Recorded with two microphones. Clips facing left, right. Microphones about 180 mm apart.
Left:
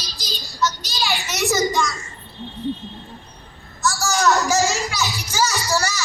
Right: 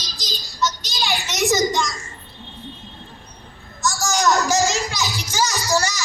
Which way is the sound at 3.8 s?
15° right (ahead or behind).